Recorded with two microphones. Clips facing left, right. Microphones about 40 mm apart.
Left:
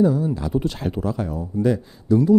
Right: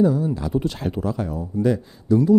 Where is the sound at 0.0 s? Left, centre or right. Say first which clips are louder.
Even; left.